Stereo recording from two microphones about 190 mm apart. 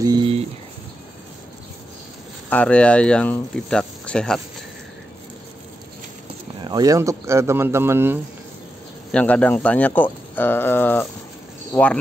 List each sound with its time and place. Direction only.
0.0 s a sound: 25° right (ahead or behind)
2.5 s speech: 5° left (ahead or behind)
6.6 s speech: 20° right (ahead or behind)
9.1 s speech: 5° left (ahead or behind)